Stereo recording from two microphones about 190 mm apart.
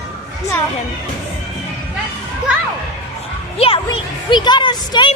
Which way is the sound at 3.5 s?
30° left (ahead or behind).